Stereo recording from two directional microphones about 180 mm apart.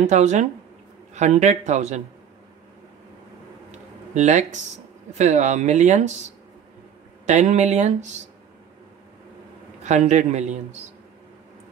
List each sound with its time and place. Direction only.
0.0 s speech: 40° right (ahead or behind)
4.1 s speech: 40° right (ahead or behind)
7.2 s speech: 40° right (ahead or behind)
9.8 s speech: 40° right (ahead or behind)